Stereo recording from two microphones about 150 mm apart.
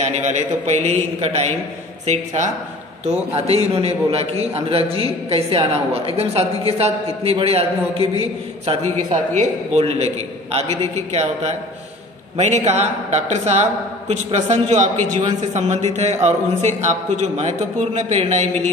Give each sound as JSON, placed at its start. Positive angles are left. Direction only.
{"t": 0.0, "sound": "a man's voice", "side_deg": -50}